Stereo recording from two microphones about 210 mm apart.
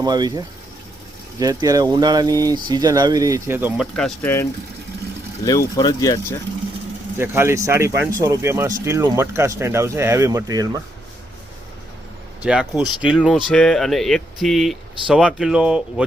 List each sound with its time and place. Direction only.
0.0 s speech: 20° right (ahead or behind)
3.9 s speech: 5° left (ahead or behind)
5.5 s speech: 20° left (ahead or behind)
7.2 s speech: 10° right (ahead or behind)
12.4 s speech: 5° right (ahead or behind)